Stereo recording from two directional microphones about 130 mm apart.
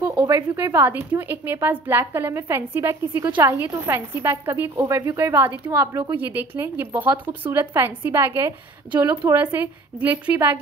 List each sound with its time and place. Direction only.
0.1 s a woman's voice: 20° right (ahead or behind)